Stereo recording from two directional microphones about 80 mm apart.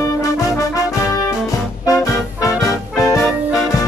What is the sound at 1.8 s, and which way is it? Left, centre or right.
Music, left.